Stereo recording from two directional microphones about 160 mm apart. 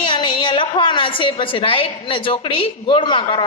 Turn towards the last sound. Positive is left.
turn(degrees=30)  # may be behind; listen again after turning